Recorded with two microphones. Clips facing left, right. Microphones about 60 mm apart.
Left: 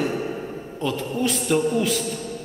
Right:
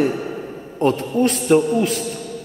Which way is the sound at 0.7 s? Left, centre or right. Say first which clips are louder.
Right 8 dB; right.